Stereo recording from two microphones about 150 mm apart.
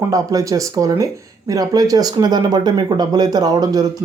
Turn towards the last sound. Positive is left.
turn(degrees=-25)  # may be behind; listen again after turning